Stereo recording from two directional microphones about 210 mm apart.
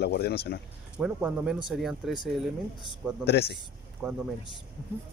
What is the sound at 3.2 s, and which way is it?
Speech, 50° left (ahead or behind).